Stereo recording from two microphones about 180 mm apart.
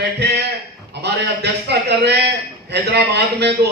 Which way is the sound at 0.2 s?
65° right (ahead or behind).